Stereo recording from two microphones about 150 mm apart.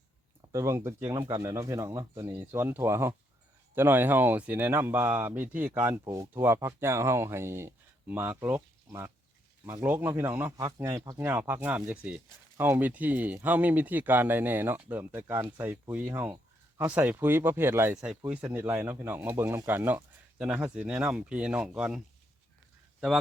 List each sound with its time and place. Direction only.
0.5 s speech: 20° right (ahead or behind)
11.2 s speech: 15° right (ahead or behind)